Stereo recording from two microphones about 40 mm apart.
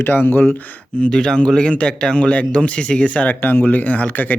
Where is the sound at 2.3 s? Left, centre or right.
Left.